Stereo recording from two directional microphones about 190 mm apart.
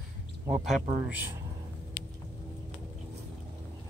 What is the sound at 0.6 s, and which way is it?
Speech, 5° right (ahead or behind).